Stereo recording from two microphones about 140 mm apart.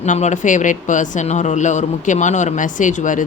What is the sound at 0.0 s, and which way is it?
Speech, 55° left (ahead or behind).